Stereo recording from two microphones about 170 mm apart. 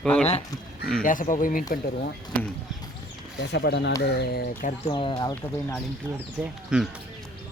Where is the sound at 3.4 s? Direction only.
90° left.